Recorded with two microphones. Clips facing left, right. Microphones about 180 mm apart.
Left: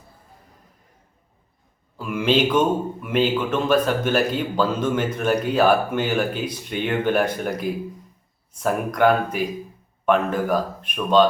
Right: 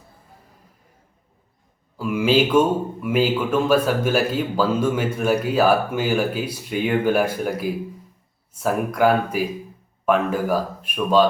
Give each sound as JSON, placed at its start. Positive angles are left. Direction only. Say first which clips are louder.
{"t": 2.0, "sound": "speech", "louder": "right 2 dB", "side_deg": -5}